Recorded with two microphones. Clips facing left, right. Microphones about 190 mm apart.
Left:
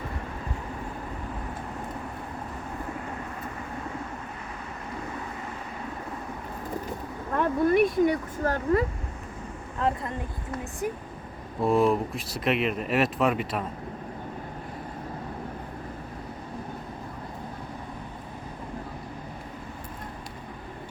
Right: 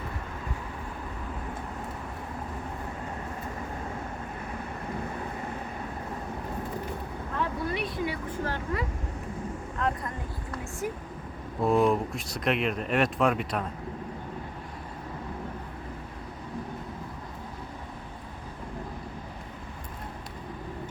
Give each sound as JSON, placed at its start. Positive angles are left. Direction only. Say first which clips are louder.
{"t": 7.3, "sound": "a sound", "louder": "left 10 dB", "side_deg": 50}
{"t": 9.8, "sound": "speech", "louder": "left 3 dB", "side_deg": 30}
{"t": 10.5, "sound": "speech", "louder": "left 3 dB", "side_deg": 20}
{"t": 11.6, "sound": "speech", "louder": "left 1 dB", "side_deg": 0}